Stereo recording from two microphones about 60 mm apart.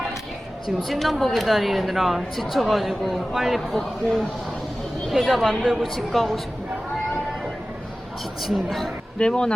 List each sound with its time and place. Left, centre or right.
0.9 s a woman's voice: centre
8.4 s a woman's voice: centre
9.1 s speech: centre